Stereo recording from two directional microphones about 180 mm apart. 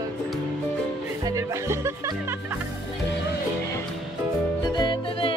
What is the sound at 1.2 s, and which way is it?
Music, 15° right (ahead or behind).